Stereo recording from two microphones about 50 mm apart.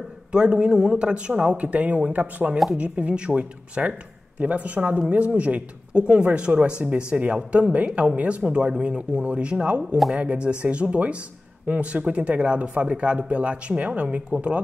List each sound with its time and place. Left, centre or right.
0.3 s speech: centre